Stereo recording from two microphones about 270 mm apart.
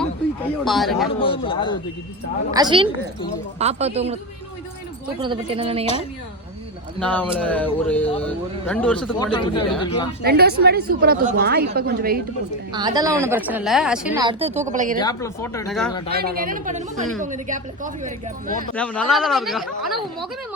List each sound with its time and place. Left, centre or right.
0.6 s speech: centre
1.2 s speech: centre
2.5 s a woman's voice: centre
5.2 s a woman's voice: centre
7.0 s speech: centre
9.3 s speech: centre
10.2 s a woman's voice: right
12.7 s a woman's voice: centre
14.2 s a woman's voice: centre
14.9 s speech: centre
15.6 s speech: centre
15.9 s speech: centre
16.1 s a woman's voice: right
18.7 s speech: centre